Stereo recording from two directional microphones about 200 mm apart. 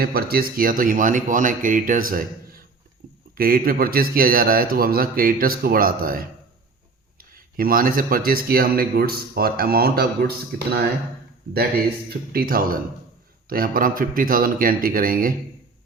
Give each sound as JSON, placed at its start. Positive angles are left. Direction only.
{"t": 0.0, "sound": "speech", "side_deg": -50}
{"t": 3.3, "sound": "speech", "side_deg": -45}
{"t": 12.3, "sound": "speech", "side_deg": -45}